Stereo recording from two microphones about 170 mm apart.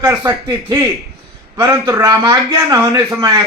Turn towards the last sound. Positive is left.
turn(degrees=-20)  # may be behind; listen again after turning